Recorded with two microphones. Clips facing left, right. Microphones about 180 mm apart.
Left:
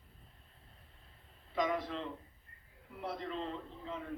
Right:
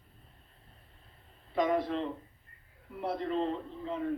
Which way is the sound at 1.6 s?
55° right (ahead or behind).